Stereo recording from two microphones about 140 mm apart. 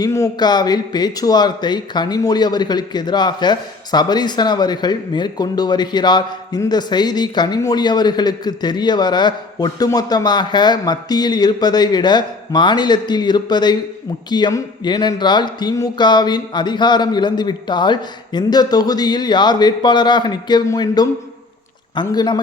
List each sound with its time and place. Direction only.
0.0 s speech: 25° left (ahead or behind)